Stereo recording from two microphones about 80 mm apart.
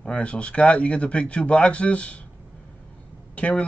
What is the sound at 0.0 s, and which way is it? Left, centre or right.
Speech, centre.